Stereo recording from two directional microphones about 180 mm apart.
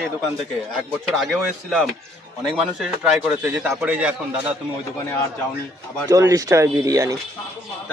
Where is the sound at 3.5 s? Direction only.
5° right (ahead or behind).